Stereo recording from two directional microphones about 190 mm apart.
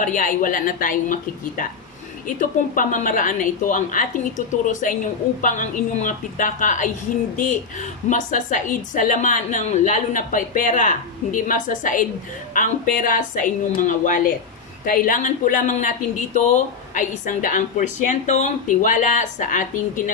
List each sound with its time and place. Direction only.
0.0 s a woman's voice: 45° left (ahead or behind)
16.9 s a woman's voice: 40° left (ahead or behind)